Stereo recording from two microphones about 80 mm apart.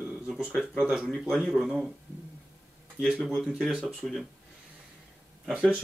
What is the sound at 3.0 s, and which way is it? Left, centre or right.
Speech, centre.